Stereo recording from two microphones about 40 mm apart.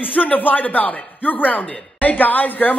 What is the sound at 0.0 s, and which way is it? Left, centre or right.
Speech, left.